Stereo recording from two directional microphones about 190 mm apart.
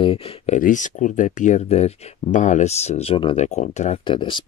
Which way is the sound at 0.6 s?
40° left (ahead or behind).